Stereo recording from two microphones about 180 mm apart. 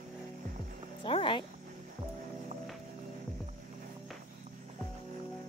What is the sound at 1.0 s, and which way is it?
Music, 30° left (ahead or behind).